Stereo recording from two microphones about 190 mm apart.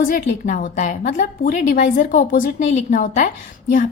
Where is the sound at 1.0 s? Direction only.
60° left (ahead or behind).